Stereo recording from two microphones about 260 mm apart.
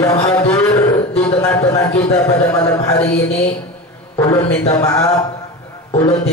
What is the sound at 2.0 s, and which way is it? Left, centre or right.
A man's voice, centre.